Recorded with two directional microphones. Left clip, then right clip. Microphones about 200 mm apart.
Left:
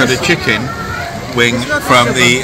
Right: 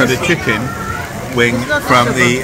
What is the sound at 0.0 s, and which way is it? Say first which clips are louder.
Speech: left 1 dB; 5° left (ahead or behind).